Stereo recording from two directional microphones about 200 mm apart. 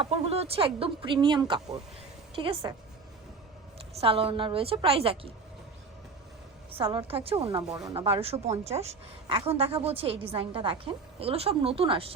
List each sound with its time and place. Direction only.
0.0 s a woman's voice: 30° right (ahead or behind)
4.0 s a woman's voice: 25° right (ahead or behind)
6.7 s a woman's voice: 25° right (ahead or behind)